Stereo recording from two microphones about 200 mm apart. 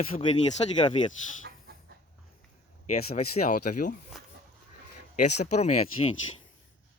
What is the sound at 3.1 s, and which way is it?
Speech, 45° left (ahead or behind).